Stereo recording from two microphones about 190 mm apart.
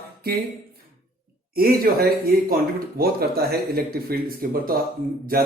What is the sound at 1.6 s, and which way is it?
Speech, 55° right (ahead or behind).